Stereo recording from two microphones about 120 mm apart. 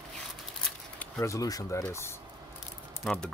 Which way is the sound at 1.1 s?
25° left (ahead or behind).